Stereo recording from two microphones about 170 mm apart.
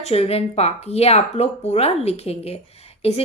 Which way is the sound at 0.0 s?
35° left (ahead or behind).